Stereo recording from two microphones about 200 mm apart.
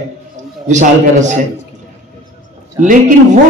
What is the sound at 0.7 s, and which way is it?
Speech, 35° right (ahead or behind).